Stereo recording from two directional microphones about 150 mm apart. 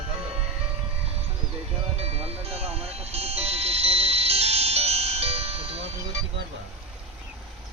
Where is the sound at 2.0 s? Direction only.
45° right (ahead or behind).